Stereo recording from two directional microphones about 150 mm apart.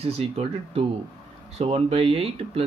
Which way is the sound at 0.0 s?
40° right (ahead or behind).